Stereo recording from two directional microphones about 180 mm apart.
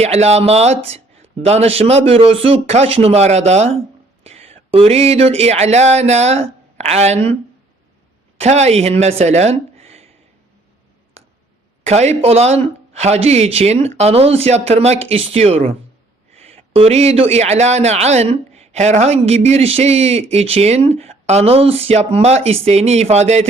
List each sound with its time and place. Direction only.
0.0 s a man's voice: 35° right (ahead or behind)
8.4 s speech: 40° right (ahead or behind)
11.8 s a man's voice: 40° right (ahead or behind)